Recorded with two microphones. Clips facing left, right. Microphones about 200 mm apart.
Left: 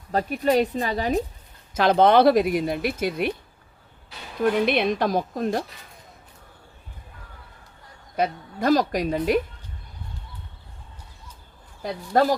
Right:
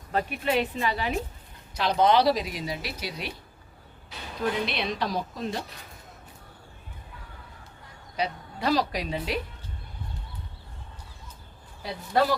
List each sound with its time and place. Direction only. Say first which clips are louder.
0.1 s a woman's voice: left 5 dB; 35° left (ahead or behind)
1.9 s speech: left 5 dB; 55° left (ahead or behind)
4.4 s a woman's voice: left 8 dB; 55° left (ahead or behind)
8.1 s a woman's voice: left 6 dB; 50° left (ahead or behind)
11.8 s a woman's voice: left 4 dB; 45° left (ahead or behind)